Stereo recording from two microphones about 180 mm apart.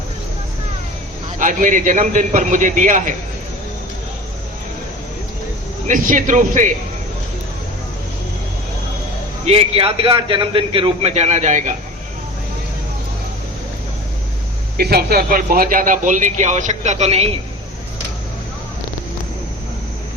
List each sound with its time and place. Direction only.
1.4 s a man's voice: 45° right (ahead or behind)
5.9 s a man's voice: 45° right (ahead or behind)
9.5 s a man's voice: 30° right (ahead or behind)
14.8 s a man's voice: 60° right (ahead or behind); by 17.3 s 35° right (ahead or behind)